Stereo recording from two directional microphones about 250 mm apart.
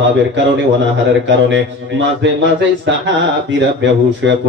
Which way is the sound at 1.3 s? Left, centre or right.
Right.